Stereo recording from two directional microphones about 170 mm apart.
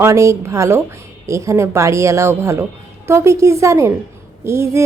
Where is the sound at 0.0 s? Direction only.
15° right (ahead or behind).